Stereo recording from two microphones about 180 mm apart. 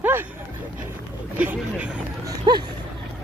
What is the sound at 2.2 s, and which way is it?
Clip-clop, 25° right (ahead or behind).